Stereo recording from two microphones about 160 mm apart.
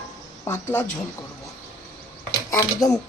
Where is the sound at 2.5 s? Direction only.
20° left (ahead or behind).